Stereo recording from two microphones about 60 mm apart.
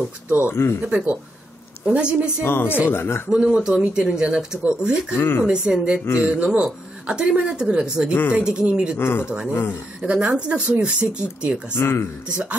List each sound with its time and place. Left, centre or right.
0.5 s speech: left
0.8 s speech: centre
2.4 s speech: left
3.3 s speech: centre
5.1 s speech: left
5.4 s speech: centre
6.2 s speech: right
8.1 s speech: left
8.4 s speech: centre
8.9 s speech: left
10.0 s speech: centre
11.7 s speech: left
12.3 s speech: centre